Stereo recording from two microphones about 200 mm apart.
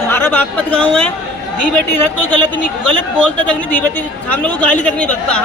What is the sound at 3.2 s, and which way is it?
Speech, 5° left (ahead or behind).